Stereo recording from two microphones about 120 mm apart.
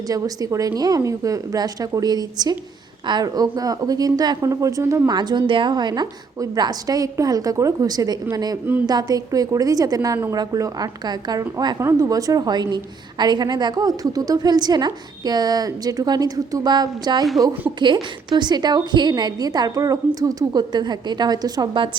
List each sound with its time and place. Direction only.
0.1 s a woman's voice: 30° right (ahead or behind)
5.1 s a woman's voice: 35° right (ahead or behind)